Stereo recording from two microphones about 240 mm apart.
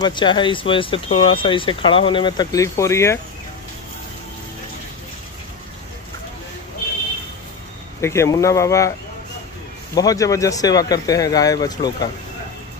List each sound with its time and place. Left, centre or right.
0.0 s speech: centre
8.0 s speech: centre
9.9 s speech: centre